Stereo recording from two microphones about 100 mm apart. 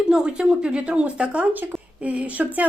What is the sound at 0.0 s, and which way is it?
A woman's voice, 10° right (ahead or behind).